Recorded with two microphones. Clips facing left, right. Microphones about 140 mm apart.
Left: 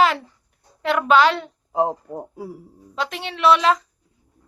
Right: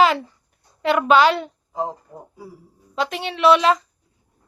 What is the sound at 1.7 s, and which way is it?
Speech, 65° left (ahead or behind).